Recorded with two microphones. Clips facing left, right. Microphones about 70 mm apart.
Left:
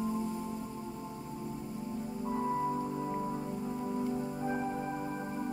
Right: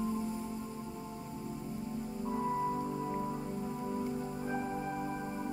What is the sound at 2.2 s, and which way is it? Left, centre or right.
Music, centre.